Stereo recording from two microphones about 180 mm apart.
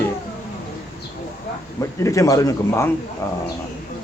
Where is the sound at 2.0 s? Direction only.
15° left (ahead or behind).